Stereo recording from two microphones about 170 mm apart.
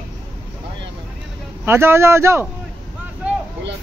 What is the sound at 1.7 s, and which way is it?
Speech, 15° right (ahead or behind).